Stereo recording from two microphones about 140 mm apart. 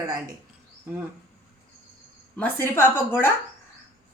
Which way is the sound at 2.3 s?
15° left (ahead or behind).